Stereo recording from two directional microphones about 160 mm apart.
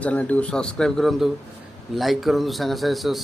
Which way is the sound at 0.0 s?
10° left (ahead or behind).